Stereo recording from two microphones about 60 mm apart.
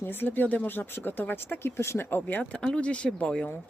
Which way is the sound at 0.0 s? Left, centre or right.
Left.